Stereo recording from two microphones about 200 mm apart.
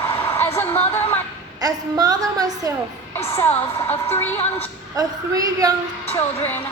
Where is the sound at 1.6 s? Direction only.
20° right (ahead or behind).